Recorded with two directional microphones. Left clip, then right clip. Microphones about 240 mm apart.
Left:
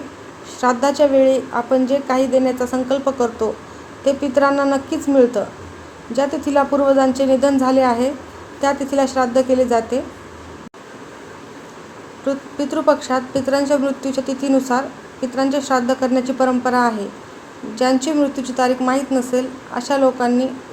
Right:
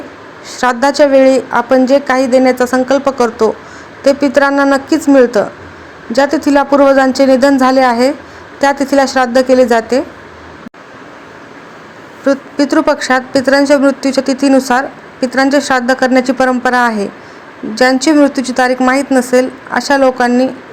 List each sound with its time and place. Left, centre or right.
0.6 s a woman's voice: right
12.2 s a sound: right
12.7 s a woman's voice: right